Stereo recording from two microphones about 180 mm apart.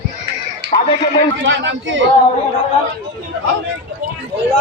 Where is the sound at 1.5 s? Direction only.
80° right.